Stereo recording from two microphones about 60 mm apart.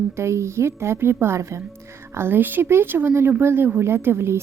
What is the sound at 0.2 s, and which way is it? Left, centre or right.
A woman's voice, right.